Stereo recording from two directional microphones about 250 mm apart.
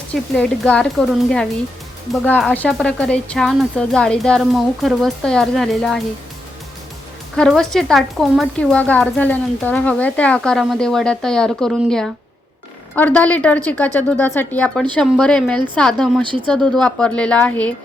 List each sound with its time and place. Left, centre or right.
0.1 s speech: centre
7.3 s speech: centre
16.2 s speech: centre
16.5 s speech: centre